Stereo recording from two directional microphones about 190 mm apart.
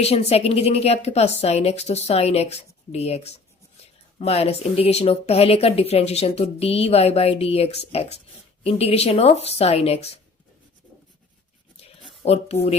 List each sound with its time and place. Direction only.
0.0 s speech: 35° left (ahead or behind)
12.2 s speech: 35° left (ahead or behind)